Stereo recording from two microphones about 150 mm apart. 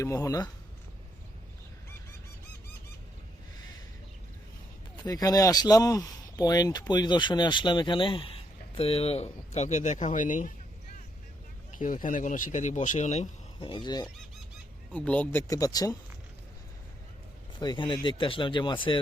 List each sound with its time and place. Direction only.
0.0 s speech: 20° left (ahead or behind)
5.0 s speech: 25° left (ahead or behind); by 10.5 s 60° left (ahead or behind)
11.8 s speech: 65° left (ahead or behind)
13.6 s speech: 35° left (ahead or behind)
14.9 s speech: 10° left (ahead or behind); by 16.0 s 25° left (ahead or behind)
17.6 s speech: 30° left (ahead or behind)